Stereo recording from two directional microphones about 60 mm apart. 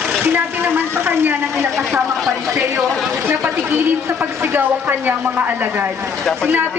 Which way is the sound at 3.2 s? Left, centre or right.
Right.